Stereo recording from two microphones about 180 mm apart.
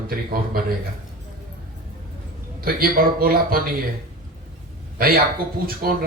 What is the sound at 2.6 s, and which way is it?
A man's voice, 55° right (ahead or behind).